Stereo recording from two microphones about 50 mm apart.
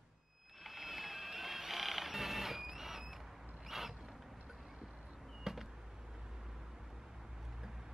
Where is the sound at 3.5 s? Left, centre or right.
Centre.